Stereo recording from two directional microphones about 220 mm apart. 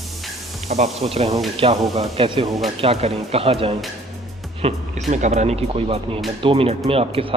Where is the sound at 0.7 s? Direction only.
30° right (ahead or behind).